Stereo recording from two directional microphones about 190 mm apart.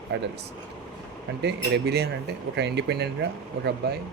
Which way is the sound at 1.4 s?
60° right (ahead or behind).